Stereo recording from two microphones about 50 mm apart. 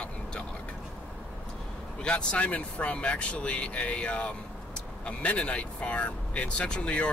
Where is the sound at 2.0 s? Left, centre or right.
Centre.